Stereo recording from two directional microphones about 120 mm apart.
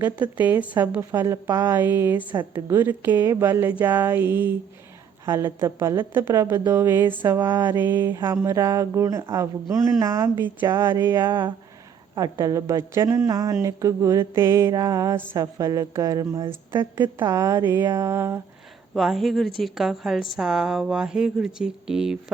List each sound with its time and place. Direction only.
0.0 s a sound: 15° right (ahead or behind)
5.2 s speech: 25° right (ahead or behind)
14.7 s music: 30° right (ahead or behind)
15.4 s speech: 30° right (ahead or behind)
18.9 s speech: centre (ahead or behind)